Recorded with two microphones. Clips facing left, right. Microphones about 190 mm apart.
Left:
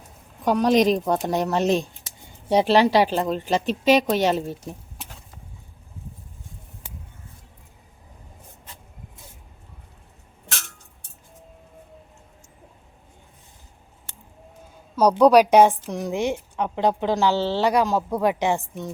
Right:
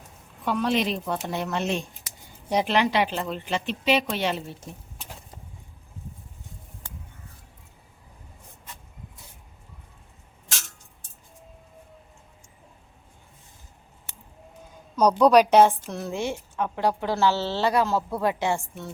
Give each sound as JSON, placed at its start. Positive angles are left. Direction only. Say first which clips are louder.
{"t": 0.4, "sound": "speech", "louder": "left 7 dB", "side_deg": 40}
{"t": 14.9, "sound": "a woman's voice", "louder": "left 2 dB", "side_deg": 10}